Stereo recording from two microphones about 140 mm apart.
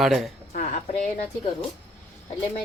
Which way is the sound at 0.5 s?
55° left (ahead or behind).